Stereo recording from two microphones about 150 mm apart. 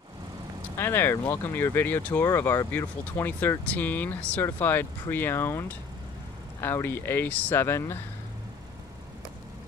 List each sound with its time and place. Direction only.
0.7 s speech: 15° left (ahead or behind)